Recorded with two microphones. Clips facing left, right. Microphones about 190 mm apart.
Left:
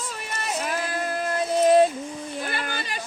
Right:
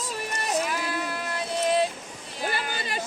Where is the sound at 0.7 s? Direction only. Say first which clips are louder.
Left 2 dB; 45° left (ahead or behind).